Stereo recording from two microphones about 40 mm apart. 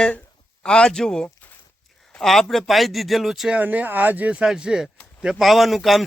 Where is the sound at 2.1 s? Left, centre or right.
Centre.